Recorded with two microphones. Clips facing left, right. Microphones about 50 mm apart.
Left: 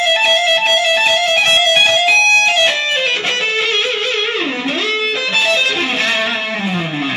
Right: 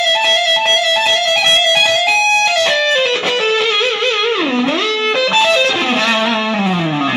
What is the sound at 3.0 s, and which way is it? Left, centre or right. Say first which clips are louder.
Music: right 2 dB; right.